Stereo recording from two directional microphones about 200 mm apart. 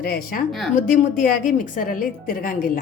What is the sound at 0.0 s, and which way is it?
A woman's voice, 45° left (ahead or behind).